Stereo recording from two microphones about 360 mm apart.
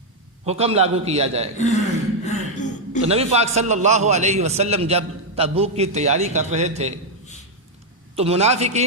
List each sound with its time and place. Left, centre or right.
0.4 s a man's voice: centre
1.5 s a man's voice: centre
2.2 s a sound: centre
3.1 s a man's voice: centre
8.1 s a man's voice: centre